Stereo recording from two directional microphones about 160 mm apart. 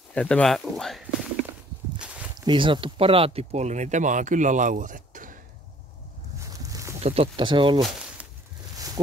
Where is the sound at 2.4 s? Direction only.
30° right (ahead or behind); by 5.4 s 55° right (ahead or behind).